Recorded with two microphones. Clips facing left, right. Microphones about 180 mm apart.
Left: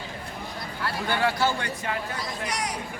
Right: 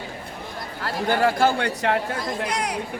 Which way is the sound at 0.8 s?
45° right (ahead or behind).